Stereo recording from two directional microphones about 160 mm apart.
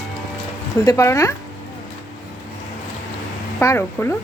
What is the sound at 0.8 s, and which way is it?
Speech, 20° left (ahead or behind).